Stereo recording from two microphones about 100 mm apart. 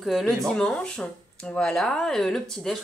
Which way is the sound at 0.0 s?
Centre (ahead or behind).